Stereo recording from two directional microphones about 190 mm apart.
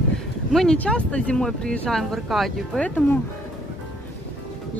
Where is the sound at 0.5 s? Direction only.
Centre (ahead or behind).